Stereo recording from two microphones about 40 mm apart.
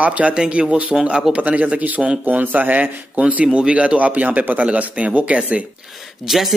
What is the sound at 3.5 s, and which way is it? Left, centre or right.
A man's voice, right.